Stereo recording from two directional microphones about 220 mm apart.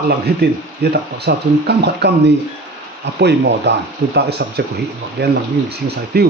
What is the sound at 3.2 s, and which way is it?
Speech, 50° right (ahead or behind).